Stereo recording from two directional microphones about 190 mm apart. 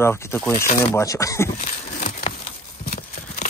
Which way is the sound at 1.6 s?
35° left (ahead or behind).